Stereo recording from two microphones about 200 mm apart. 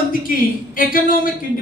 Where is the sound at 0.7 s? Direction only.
45° left (ahead or behind).